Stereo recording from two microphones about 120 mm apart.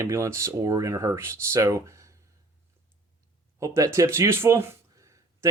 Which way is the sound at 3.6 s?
25° right (ahead or behind).